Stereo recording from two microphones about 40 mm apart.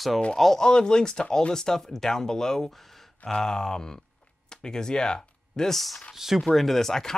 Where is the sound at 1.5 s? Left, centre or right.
Centre.